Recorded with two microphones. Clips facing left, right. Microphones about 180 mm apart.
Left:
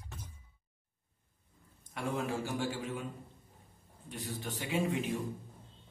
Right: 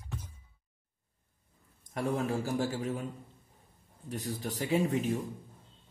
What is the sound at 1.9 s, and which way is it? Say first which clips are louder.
A man's voice: right 4 dB; 40° right (ahead or behind).